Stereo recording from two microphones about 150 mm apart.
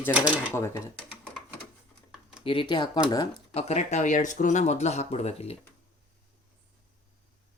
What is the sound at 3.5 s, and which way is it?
Speech, 45° left (ahead or behind).